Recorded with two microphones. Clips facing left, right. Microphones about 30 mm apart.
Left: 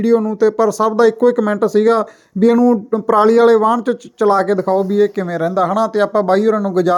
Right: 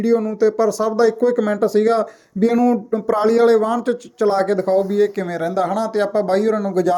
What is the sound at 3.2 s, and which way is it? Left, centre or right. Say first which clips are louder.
Speech: left 3 dB; left.